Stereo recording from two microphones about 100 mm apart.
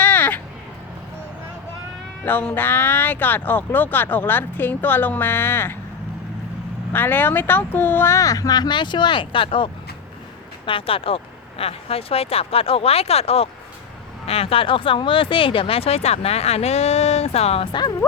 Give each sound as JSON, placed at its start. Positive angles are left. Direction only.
{"t": 0.0, "sound": "a sound", "side_deg": 20}
{"t": 2.2, "sound": "speech", "side_deg": 15}
{"t": 6.9, "sound": "speech", "side_deg": 20}
{"t": 10.7, "sound": "speech", "side_deg": 65}